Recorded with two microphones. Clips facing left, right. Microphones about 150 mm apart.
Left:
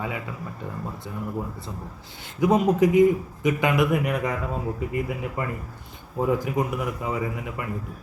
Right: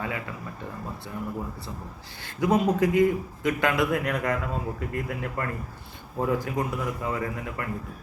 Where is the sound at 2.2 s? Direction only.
20° left (ahead or behind).